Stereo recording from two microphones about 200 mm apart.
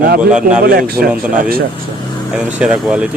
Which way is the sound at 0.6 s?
50° right (ahead or behind).